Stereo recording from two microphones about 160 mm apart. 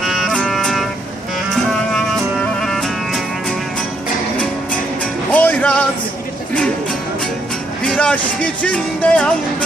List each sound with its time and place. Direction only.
0.0 s music: centre (ahead or behind)
2.6 s music: centre (ahead or behind)
5.3 s music: 10° left (ahead or behind)
7.9 s speech: 10° left (ahead or behind)